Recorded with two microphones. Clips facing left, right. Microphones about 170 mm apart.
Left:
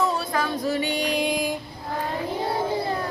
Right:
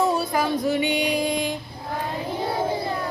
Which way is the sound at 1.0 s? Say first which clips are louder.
Right 1 dB; centre (ahead or behind).